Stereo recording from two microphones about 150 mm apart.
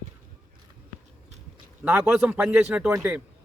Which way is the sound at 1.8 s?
10° right (ahead or behind).